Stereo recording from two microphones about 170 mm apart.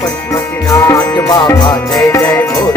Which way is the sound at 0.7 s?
15° left (ahead or behind).